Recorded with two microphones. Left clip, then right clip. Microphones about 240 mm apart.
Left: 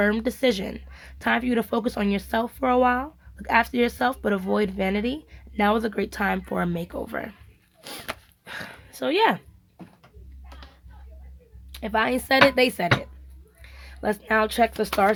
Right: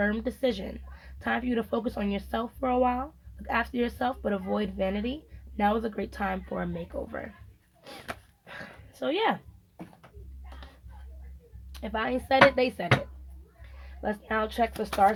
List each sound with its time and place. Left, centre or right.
0.0 s speech: left
7.8 s a sound: left
11.8 s speech: left
14.0 s speech: left